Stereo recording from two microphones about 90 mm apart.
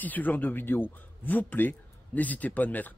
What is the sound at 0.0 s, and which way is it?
Speech, 20° left (ahead or behind).